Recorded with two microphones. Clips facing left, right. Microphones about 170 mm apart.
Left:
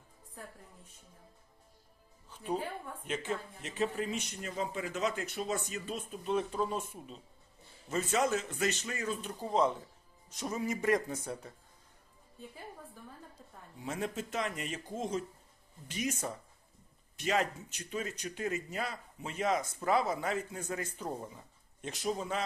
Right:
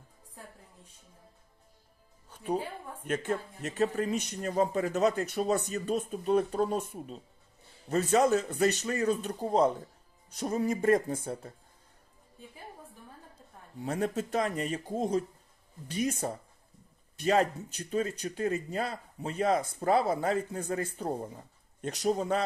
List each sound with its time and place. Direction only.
3.0 s a man's voice: 50° right (ahead or behind)
10.9 s speech: 50° right (ahead or behind)
14.0 s a man's voice: 40° right (ahead or behind)